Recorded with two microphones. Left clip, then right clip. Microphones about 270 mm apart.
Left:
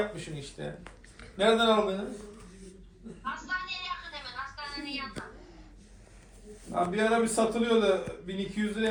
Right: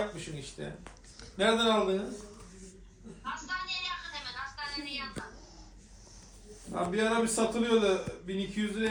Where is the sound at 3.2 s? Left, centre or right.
Centre.